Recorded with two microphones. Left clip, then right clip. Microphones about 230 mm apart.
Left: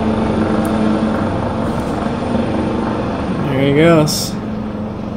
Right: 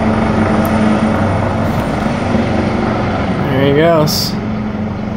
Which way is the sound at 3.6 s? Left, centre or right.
Centre.